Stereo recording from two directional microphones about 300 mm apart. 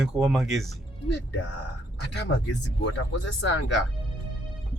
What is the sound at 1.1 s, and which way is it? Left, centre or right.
Speech, left.